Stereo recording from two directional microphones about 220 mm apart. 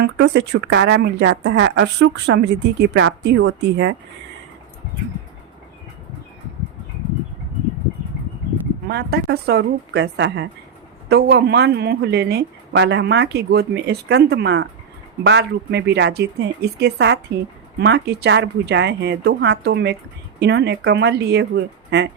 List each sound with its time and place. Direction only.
0.0 s a woman's voice: 50° right (ahead or behind)
8.9 s a woman's voice: 45° right (ahead or behind)